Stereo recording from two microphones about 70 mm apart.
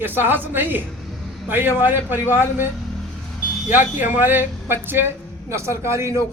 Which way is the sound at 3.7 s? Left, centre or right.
Right.